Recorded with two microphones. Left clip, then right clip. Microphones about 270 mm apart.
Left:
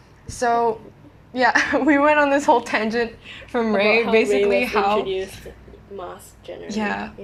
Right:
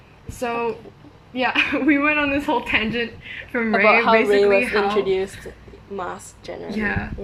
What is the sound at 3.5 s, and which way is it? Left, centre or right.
Speech, centre.